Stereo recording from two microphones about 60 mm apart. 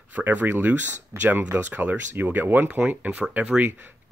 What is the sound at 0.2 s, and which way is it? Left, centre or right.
Speech, right.